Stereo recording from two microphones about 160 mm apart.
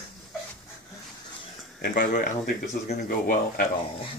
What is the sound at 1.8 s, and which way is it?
Speech, 60° left (ahead or behind).